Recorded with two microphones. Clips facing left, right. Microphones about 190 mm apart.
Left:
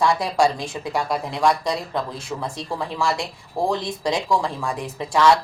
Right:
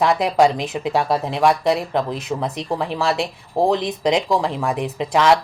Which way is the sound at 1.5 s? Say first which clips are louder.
Right 4 dB; 20° right (ahead or behind).